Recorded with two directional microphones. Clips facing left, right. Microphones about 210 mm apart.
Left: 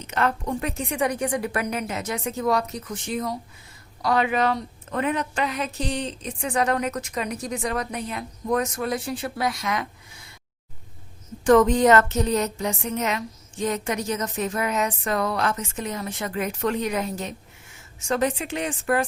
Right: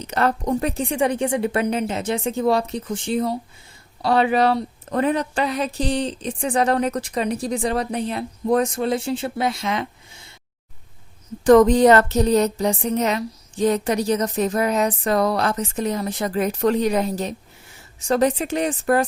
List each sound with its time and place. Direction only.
0.0 s a woman's voice: 35° right (ahead or behind)
11.4 s a woman's voice: 35° right (ahead or behind)